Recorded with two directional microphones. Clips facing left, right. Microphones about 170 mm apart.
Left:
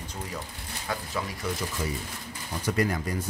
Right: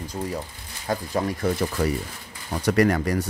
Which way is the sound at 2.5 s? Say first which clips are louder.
Right 7 dB; 70° right (ahead or behind).